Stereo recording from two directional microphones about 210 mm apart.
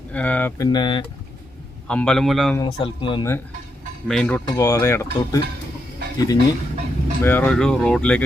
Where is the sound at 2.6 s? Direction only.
25° left (ahead or behind).